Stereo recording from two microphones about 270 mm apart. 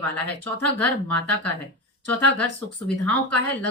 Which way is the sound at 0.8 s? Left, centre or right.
Centre.